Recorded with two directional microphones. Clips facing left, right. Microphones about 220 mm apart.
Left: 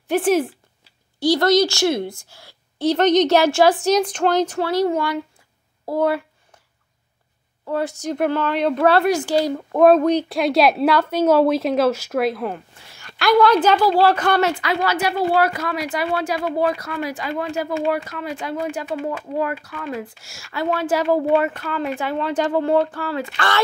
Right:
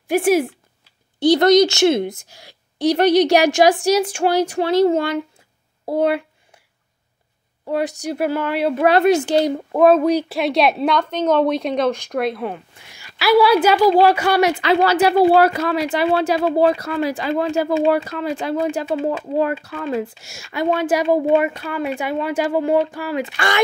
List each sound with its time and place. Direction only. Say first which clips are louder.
0.1 s a woman's voice: right 2 dB; 10° right (ahead or behind)
5.9 s a sound: right 2 dB; 20° right (ahead or behind)
7.6 s a woman's voice: right 2 dB; 15° right (ahead or behind)
9.8 s a woman's voice: even; 5° right (ahead or behind)
14.6 s speech: right 6 dB; 30° right (ahead or behind); by 23.6 s 15° right (ahead or behind)